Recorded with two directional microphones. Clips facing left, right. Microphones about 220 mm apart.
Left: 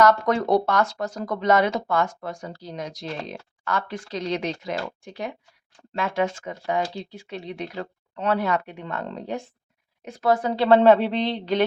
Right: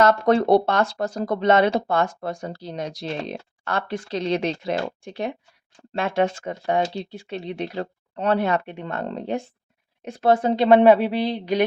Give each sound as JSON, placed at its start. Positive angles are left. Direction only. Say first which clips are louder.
{"t": 0.0, "sound": "a woman's voice", "louder": "right 2 dB", "side_deg": -30}